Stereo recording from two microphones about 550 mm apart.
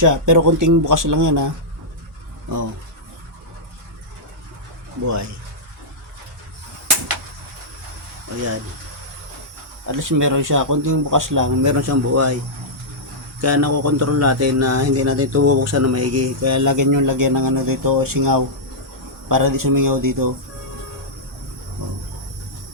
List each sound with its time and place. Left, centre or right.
0.0 s speech: right
9.8 s speech: right
13.4 s speech: right